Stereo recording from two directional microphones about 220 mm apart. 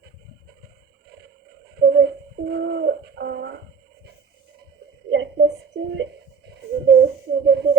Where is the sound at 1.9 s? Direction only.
50° right (ahead or behind).